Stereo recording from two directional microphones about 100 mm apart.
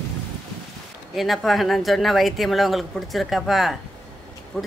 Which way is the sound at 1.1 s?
Centre (ahead or behind).